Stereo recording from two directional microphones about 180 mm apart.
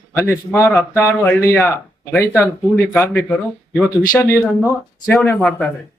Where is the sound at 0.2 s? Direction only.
15° left (ahead or behind).